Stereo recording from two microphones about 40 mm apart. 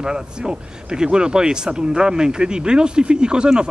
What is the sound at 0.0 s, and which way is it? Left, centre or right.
Speech, right.